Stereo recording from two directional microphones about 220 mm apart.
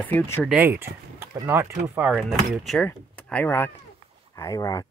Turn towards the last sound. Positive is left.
turn(degrees=15)  # may be behind; listen again after turning